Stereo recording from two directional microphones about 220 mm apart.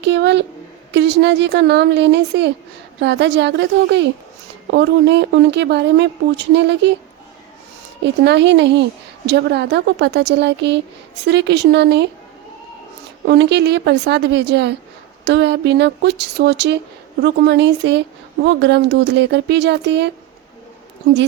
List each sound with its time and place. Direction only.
0.0 s a woman's voice: 55° right (ahead or behind)
8.0 s a woman's voice: 50° right (ahead or behind)
13.2 s a woman's voice: 50° right (ahead or behind)